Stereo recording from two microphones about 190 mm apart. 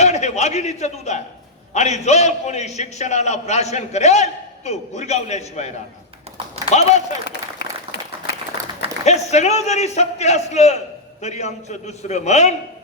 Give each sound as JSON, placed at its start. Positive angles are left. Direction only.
{"t": 0.0, "sound": "a man's voice", "side_deg": 35}
{"t": 7.6, "sound": "applause", "side_deg": 55}
{"t": 9.0, "sound": "a man's voice", "side_deg": 35}